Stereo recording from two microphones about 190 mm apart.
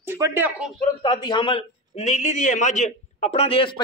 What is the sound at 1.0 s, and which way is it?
A man's voice, 25° left (ahead or behind).